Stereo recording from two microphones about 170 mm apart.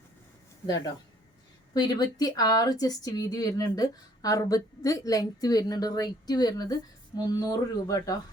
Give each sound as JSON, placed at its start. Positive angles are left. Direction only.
{"t": 1.7, "sound": "speech", "side_deg": 20}